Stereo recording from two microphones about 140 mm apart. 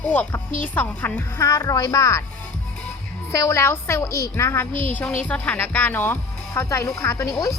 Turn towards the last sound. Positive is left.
turn(degrees=25)  # may be behind; listen again after turning